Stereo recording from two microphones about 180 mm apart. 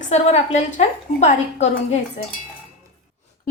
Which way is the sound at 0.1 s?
40° left (ahead or behind).